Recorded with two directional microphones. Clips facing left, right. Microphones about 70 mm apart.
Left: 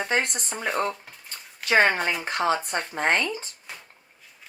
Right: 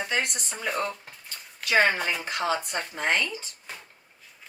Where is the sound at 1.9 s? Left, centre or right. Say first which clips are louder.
Left 2 dB; left.